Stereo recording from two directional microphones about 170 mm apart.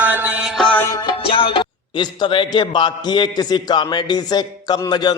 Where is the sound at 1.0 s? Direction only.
30° left (ahead or behind).